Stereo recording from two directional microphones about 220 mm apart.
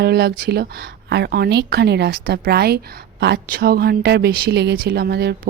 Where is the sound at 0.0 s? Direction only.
45° right (ahead or behind).